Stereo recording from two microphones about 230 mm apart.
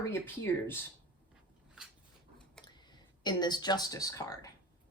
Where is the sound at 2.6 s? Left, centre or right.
Centre.